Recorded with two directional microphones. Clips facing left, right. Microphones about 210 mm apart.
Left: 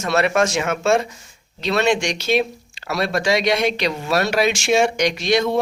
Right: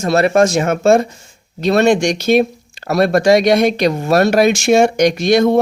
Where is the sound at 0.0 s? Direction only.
35° right (ahead or behind).